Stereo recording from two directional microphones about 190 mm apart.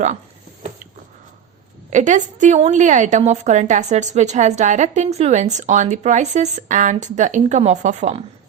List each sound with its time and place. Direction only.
1.9 s a woman's voice: 40° right (ahead or behind)